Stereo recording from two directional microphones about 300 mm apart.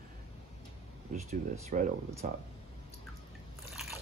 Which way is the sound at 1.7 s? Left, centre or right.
Right.